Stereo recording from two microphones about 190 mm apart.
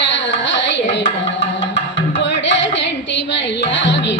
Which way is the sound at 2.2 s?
70° left (ahead or behind).